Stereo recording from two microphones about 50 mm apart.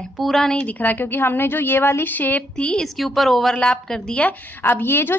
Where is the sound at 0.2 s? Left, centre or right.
Centre.